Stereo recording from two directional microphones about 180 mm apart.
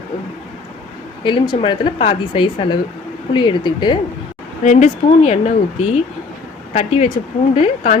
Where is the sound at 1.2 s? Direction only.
25° left (ahead or behind).